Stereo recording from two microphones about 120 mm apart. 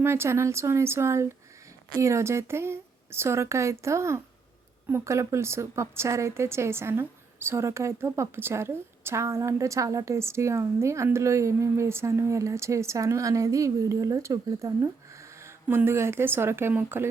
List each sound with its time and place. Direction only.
0.0 s a woman's voice: 20° right (ahead or behind)